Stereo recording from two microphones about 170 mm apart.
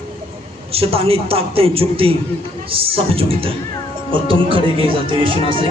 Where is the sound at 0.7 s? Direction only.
35° right (ahead or behind).